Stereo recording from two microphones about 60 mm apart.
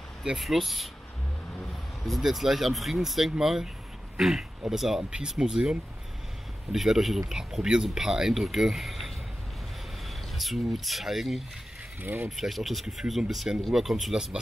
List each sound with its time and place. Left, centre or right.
0.4 s speech: centre
2.0 s speech: centre
10.3 s speech: centre
12.0 s speech: right
12.3 s speech: centre